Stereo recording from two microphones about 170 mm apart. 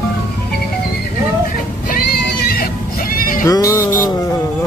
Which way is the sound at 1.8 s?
60° left (ahead or behind).